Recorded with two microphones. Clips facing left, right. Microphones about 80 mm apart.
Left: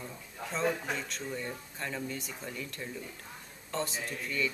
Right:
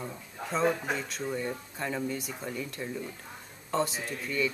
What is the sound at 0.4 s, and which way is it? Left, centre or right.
Speech, centre.